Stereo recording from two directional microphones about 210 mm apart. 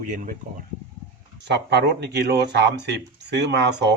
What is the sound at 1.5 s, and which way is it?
Speech, 55° right (ahead or behind).